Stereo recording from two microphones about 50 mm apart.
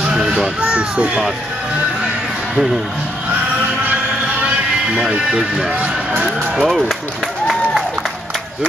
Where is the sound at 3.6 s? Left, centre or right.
Right.